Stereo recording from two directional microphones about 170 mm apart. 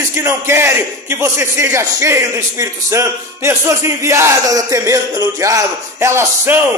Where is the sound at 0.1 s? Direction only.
15° right (ahead or behind).